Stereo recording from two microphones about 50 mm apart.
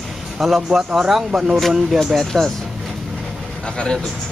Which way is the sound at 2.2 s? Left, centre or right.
Centre.